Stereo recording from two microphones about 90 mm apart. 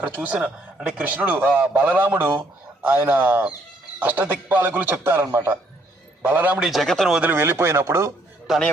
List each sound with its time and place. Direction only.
0.0 s a man's voice: 20° right (ahead or behind)
6.2 s a man's voice: 20° right (ahead or behind)
6.6 s speech: centre (ahead or behind)
7.2 s a man's voice: 20° right (ahead or behind)
8.4 s a man's voice: 5° left (ahead or behind)